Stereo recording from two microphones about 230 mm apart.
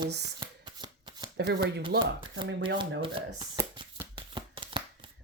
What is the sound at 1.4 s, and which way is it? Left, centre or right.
Speech, right.